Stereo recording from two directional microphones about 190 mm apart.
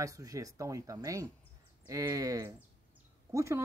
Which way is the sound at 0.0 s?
15° right (ahead or behind).